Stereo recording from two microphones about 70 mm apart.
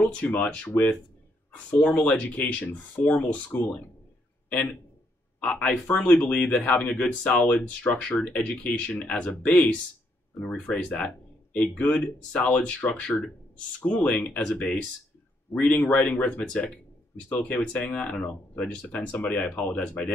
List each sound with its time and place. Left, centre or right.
0.0 s a man's voice: left
17.7 s speech: centre